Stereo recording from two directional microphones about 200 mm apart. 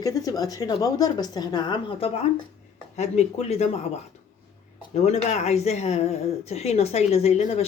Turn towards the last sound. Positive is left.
turn(degrees=30)  # may be behind; listen again after turning